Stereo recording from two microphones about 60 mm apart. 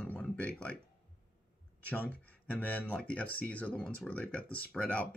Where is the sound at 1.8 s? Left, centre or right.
Centre.